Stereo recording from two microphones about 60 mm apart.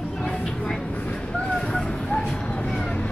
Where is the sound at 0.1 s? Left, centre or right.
Centre.